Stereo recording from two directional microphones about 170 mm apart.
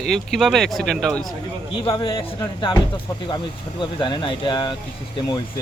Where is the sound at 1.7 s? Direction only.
30° left (ahead or behind).